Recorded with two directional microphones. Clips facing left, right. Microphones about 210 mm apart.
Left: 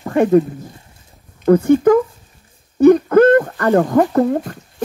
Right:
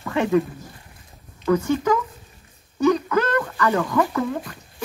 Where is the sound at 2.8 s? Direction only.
55° left (ahead or behind).